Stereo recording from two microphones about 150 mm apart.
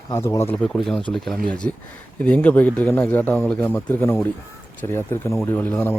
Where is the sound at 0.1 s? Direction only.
20° left (ahead or behind).